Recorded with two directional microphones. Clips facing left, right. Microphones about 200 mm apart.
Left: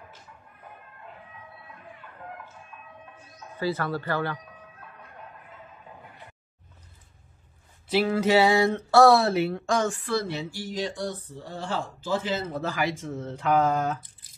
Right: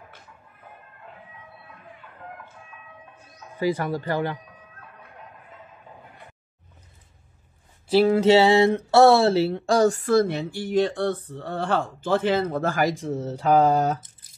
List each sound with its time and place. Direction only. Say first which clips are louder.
3.5 s speech: right 4 dB; 15° right (ahead or behind)
7.9 s a sound: right 5 dB; 30° right (ahead or behind)
8.9 s a woman's voice: right 2 dB; 25° right (ahead or behind)